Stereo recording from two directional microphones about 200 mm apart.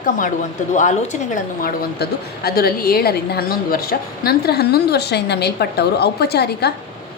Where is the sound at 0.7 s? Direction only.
35° left (ahead or behind).